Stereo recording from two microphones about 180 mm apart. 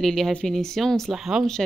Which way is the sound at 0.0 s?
Centre (ahead or behind).